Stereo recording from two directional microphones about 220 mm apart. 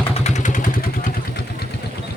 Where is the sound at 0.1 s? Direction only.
30° left (ahead or behind).